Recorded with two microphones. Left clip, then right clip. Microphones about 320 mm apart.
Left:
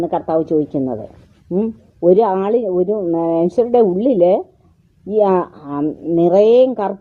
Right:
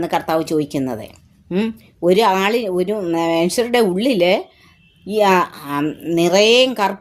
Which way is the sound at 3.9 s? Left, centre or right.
Centre.